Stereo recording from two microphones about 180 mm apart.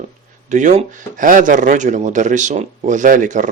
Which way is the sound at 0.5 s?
40° right (ahead or behind).